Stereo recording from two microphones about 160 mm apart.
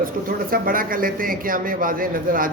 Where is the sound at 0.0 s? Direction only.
65° right (ahead or behind).